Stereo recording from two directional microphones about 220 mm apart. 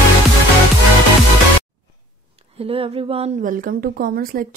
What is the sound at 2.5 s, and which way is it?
A woman's voice, 25° right (ahead or behind).